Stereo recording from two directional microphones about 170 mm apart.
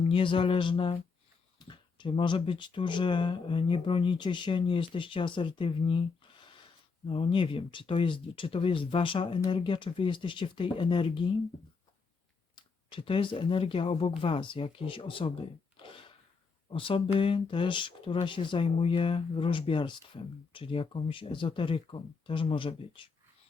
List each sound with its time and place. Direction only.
0.0 s speech: 30° left (ahead or behind)
12.5 s speech: 30° left (ahead or behind)